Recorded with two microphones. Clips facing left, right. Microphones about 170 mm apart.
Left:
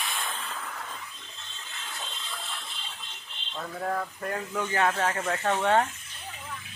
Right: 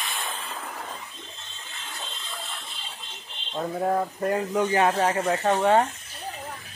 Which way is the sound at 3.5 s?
30° right (ahead or behind).